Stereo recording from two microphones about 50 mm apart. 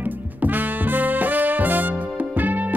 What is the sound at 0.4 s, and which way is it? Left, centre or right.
Music, right.